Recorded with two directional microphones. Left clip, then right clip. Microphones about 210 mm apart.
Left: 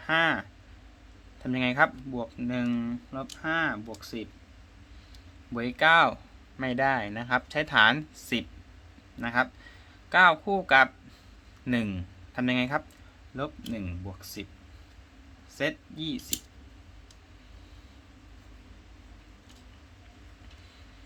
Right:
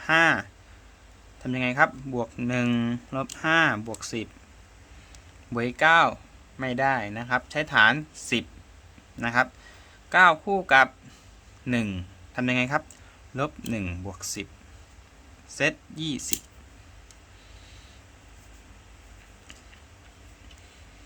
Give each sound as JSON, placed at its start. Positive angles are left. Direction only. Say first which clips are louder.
{"t": 0.0, "sound": "speech", "louder": "right 5 dB", "side_deg": -10}
{"t": 2.1, "sound": "speech", "louder": "right 5 dB", "side_deg": -15}
{"t": 5.5, "sound": "speech", "louder": "right 2 dB", "side_deg": -10}
{"t": 13.3, "sound": "speech", "louder": "right 5 dB", "side_deg": -15}
{"t": 15.5, "sound": "speech", "louder": "right 5 dB", "side_deg": -15}